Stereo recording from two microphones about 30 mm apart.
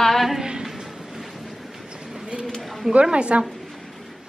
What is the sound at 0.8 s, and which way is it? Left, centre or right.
Train, centre.